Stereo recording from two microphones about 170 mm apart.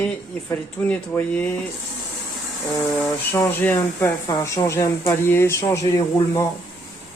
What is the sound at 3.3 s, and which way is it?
Speech, 10° left (ahead or behind).